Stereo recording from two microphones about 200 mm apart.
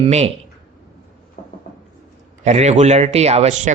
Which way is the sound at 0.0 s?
35° right (ahead or behind).